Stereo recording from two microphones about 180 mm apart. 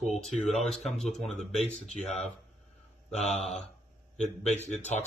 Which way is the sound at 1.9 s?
35° left (ahead or behind).